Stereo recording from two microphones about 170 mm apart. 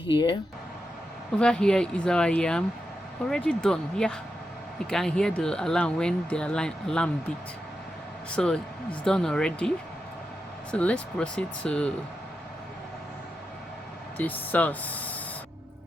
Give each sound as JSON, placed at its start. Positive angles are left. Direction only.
{"t": 0.1, "sound": "speech", "side_deg": 25}
{"t": 1.4, "sound": "speech", "side_deg": 5}
{"t": 8.3, "sound": "speech", "side_deg": 5}
{"t": 14.2, "sound": "speech", "side_deg": 10}